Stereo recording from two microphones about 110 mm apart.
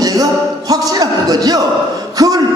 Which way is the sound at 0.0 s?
35° right (ahead or behind).